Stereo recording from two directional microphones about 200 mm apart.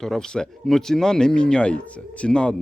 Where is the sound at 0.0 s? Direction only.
Centre (ahead or behind).